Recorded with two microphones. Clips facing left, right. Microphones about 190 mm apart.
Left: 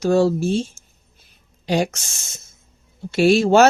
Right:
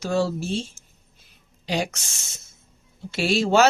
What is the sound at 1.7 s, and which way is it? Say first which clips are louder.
Speech: left 6 dB; 50° left (ahead or behind).